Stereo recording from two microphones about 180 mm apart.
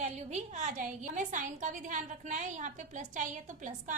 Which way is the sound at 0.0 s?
40° right (ahead or behind).